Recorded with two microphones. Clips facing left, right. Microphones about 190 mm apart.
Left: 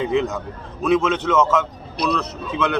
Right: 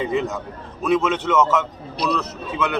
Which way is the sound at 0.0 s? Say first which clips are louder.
Left 2 dB; centre (ahead or behind).